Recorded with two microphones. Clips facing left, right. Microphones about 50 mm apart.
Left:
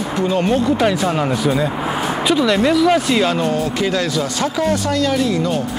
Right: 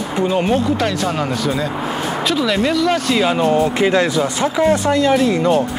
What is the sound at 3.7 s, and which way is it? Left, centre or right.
Speech, right.